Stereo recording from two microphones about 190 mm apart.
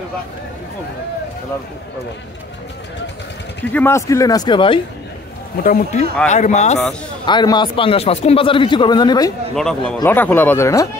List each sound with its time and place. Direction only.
3.7 s speech: 15° left (ahead or behind)
5.6 s a man's voice: 45° left (ahead or behind)
7.2 s speech: 25° left (ahead or behind)
9.6 s speech: 5° left (ahead or behind)